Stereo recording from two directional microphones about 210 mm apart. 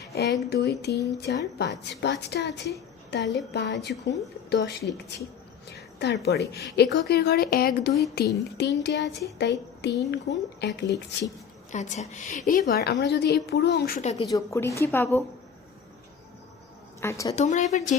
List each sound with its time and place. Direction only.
0.0 s a woman's voice: 50° left (ahead or behind)
11.7 s a woman's voice: 35° left (ahead or behind)
14.2 s a woman's voice: 15° left (ahead or behind)
17.0 s a woman's voice: 15° left (ahead or behind)
17.3 s a woman's voice: 35° left (ahead or behind)